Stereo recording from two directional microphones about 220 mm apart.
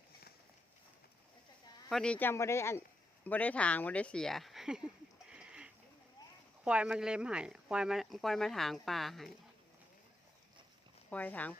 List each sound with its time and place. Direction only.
1.9 s speech: 5° left (ahead or behind)
5.3 s a sound: 5° right (ahead or behind)
6.7 s speech: 5° right (ahead or behind)
11.1 s speech: 5° left (ahead or behind)